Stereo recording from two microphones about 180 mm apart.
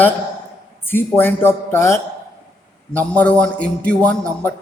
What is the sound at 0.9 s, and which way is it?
A man's voice, 10° left (ahead or behind).